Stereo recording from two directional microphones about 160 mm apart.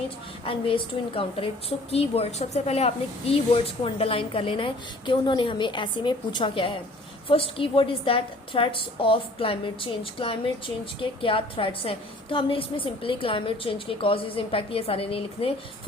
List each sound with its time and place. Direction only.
0.4 s a woman's voice: 35° left (ahead or behind)